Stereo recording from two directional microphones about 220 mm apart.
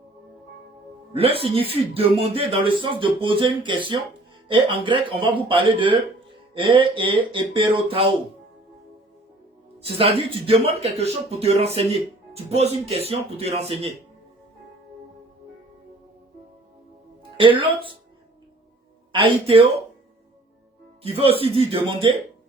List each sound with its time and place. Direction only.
1.1 s speech: 25° right (ahead or behind)
9.8 s speech: 25° right (ahead or behind)
17.4 s speech: 20° right (ahead or behind)
19.1 s speech: 25° right (ahead or behind)
21.2 s speech: 25° right (ahead or behind)